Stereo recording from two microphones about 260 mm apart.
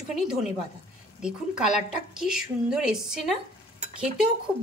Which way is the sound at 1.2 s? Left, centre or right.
Centre.